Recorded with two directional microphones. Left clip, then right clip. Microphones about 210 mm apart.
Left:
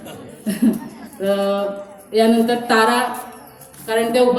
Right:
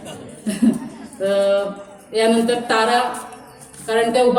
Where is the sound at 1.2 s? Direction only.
10° left (ahead or behind).